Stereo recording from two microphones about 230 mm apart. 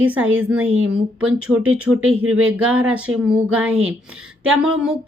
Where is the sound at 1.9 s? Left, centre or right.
Right.